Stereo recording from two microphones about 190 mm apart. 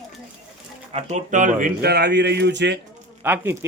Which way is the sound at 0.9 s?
35° right (ahead or behind).